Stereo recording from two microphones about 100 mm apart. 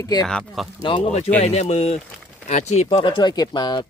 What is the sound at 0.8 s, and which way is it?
Speech, 55° left (ahead or behind).